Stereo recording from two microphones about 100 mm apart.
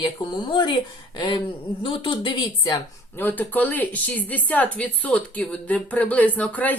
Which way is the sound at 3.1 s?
20° left (ahead or behind).